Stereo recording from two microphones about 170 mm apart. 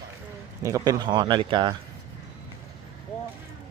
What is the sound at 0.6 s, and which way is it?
Speech, 20° right (ahead or behind).